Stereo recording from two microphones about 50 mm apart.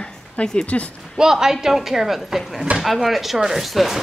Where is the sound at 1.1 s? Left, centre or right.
Centre.